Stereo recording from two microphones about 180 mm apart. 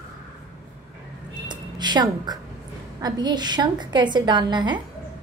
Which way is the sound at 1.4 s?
25° right (ahead or behind).